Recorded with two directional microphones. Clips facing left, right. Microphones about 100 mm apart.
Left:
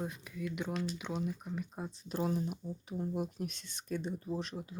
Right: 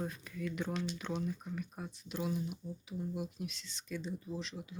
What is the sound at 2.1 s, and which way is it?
Speech, 40° left (ahead or behind).